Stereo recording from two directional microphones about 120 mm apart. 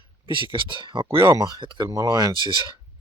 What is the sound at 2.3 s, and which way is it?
Speech, 35° left (ahead or behind).